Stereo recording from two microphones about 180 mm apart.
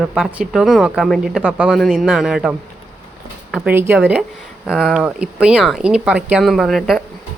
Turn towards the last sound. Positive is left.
turn(degrees=0)  # may be behind; listen again after turning